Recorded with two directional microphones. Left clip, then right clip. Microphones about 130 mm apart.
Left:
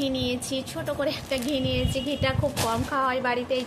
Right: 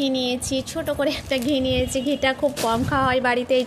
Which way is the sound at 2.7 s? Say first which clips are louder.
Right 5 dB; 55° right (ahead or behind).